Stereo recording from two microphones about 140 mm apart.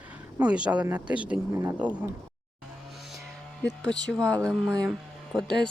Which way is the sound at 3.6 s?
5° left (ahead or behind).